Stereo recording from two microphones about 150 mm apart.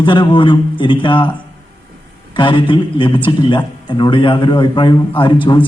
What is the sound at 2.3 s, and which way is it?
Speech, 30° left (ahead or behind).